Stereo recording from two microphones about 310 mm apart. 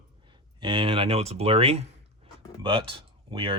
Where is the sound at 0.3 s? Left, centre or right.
Centre.